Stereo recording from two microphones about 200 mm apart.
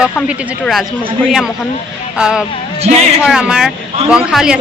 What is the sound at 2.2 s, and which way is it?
Speech, 5° right (ahead or behind).